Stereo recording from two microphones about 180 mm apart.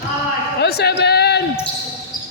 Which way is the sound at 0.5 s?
65° left (ahead or behind).